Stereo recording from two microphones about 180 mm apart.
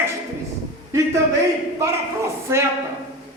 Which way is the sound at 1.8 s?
15° right (ahead or behind).